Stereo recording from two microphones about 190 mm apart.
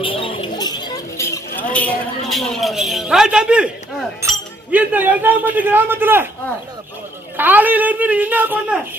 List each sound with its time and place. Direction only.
0.0 s a sound: 25° left (ahead or behind)
1.7 s speech: 5° left (ahead or behind); by 6.2 s 10° right (ahead or behind)
7.3 s speech: 10° right (ahead or behind)